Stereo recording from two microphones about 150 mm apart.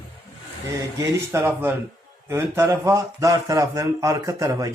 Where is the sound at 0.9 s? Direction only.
20° right (ahead or behind).